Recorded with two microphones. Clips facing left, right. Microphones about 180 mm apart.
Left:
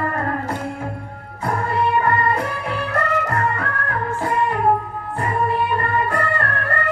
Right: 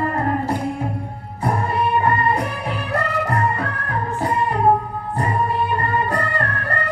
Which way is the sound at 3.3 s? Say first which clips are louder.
Right 1 dB; 15° right (ahead or behind).